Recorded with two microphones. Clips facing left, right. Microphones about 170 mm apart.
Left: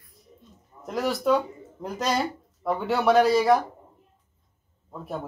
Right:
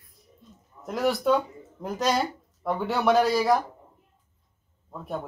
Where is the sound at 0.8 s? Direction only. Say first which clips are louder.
Even; centre (ahead or behind).